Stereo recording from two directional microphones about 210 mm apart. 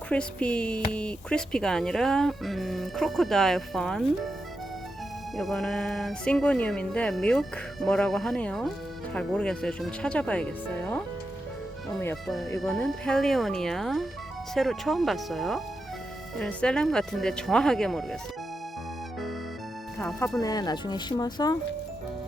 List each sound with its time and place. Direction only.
0.1 s speech: 5° left (ahead or behind)
5.4 s speech: centre (ahead or behind)
20.0 s speech: 5° left (ahead or behind)
20.4 s speech: 20° left (ahead or behind)